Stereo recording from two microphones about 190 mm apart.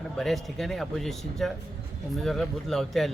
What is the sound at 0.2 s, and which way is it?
Speech, centre (ahead or behind).